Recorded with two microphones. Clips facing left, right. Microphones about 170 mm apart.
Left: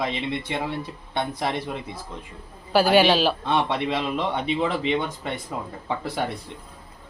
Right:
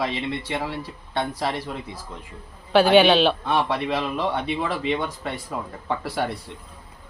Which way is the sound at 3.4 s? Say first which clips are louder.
Even; 20° left (ahead or behind).